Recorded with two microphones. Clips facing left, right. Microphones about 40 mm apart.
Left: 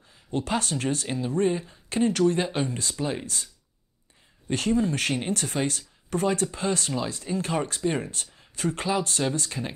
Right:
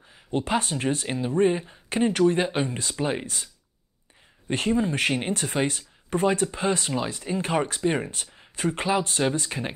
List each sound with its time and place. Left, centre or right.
0.1 s speech: right
4.5 s speech: right